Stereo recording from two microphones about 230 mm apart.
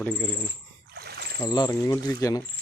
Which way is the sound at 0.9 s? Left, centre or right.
Right.